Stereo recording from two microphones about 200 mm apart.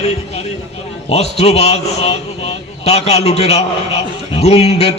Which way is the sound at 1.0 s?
30° left (ahead or behind).